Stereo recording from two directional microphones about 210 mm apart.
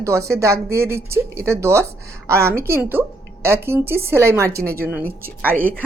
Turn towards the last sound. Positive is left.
turn(degrees=-40)  # may be behind; listen again after turning